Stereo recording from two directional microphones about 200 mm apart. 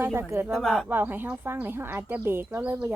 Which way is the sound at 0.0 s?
10° right (ahead or behind).